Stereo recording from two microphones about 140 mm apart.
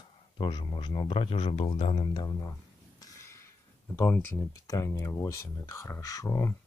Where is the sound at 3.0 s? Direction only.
20° left (ahead or behind).